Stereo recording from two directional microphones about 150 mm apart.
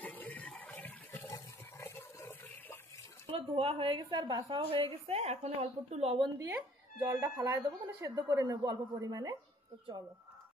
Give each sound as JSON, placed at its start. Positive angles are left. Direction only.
{"t": 0.0, "sound": "toilet flush", "side_deg": 10}
{"t": 3.3, "sound": "a woman's voice", "side_deg": -40}
{"t": 4.6, "sound": "a woman's voice", "side_deg": -40}
{"t": 6.4, "sound": "speech", "side_deg": -20}